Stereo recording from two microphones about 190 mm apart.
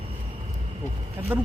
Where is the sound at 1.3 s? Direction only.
10° right (ahead or behind).